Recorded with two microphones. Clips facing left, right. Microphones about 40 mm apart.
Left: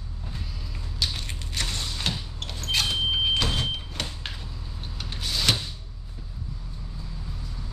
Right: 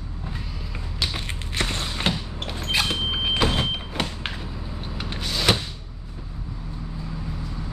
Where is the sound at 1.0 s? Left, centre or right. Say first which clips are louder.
Right 3 dB; right.